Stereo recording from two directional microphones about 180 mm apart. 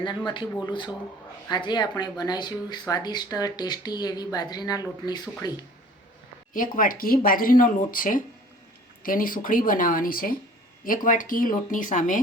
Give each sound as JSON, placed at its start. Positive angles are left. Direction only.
{"t": 0.6, "sound": "speech", "side_deg": 25}
{"t": 6.5, "sound": "speech", "side_deg": 50}